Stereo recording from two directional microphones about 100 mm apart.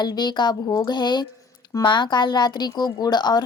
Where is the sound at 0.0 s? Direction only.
45° left (ahead or behind).